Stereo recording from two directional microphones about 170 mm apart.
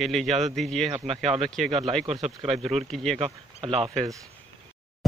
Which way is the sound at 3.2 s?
35° right (ahead or behind).